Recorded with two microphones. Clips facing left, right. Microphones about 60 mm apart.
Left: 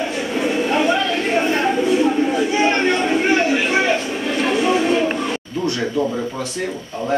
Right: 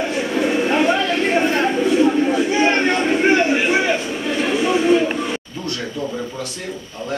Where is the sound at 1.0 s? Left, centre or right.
Right.